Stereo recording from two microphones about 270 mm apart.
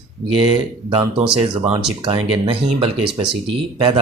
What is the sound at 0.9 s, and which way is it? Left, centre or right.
Speech, right.